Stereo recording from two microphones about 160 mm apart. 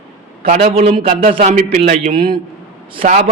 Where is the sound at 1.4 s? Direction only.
50° right (ahead or behind).